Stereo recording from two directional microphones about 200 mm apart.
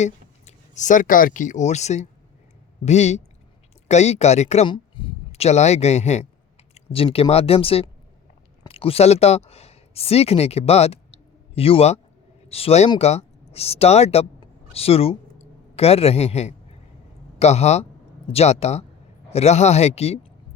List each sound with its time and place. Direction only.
0.0 s a man's voice: 35° left (ahead or behind)